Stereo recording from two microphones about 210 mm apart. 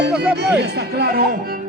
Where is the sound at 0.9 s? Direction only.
50° right (ahead or behind).